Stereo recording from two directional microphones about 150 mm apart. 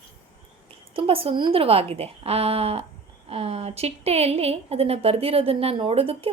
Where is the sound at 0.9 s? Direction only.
40° right (ahead or behind).